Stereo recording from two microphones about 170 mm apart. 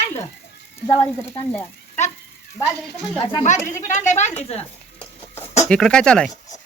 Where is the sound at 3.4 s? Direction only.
45° left (ahead or behind).